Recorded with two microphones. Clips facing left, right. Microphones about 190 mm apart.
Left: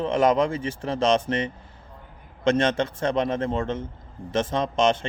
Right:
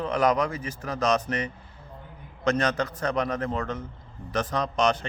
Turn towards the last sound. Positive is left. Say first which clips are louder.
# left 3 dB
turn(degrees=25)  # may be behind; listen again after turning